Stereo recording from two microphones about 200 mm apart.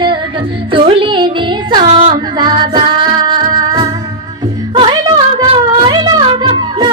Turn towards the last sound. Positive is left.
turn(degrees=-25)  # may be behind; listen again after turning